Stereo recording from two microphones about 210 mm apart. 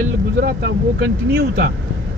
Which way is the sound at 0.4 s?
50° right (ahead or behind).